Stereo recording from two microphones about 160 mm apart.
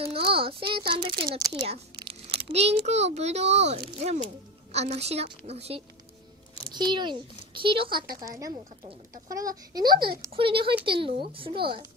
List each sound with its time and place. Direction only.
0.3 s a child's voice: 35° right (ahead or behind)
2.0 s crumpling: 35° right (ahead or behind)
2.9 s a child's voice: 45° right (ahead or behind)
6.7 s a child's voice: 30° right (ahead or behind)
8.2 s a child's voice: 20° right (ahead or behind)